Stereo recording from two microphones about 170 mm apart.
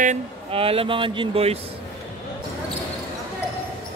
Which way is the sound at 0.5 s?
35° right (ahead or behind).